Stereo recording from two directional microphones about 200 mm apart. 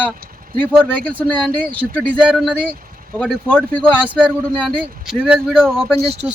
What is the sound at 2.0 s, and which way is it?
Speech, 5° right (ahead or behind).